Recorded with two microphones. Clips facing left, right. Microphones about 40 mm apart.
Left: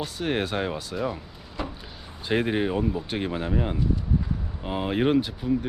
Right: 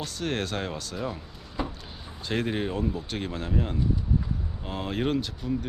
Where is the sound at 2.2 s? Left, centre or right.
Centre.